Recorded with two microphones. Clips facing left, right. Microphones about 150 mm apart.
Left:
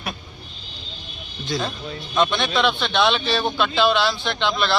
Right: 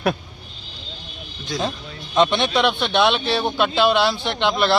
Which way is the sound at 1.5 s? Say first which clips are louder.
Right 1 dB; 10° right (ahead or behind).